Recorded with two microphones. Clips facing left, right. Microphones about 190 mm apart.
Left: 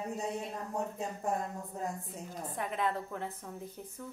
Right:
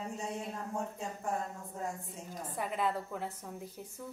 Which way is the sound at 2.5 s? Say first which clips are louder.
Even; 5° right (ahead or behind).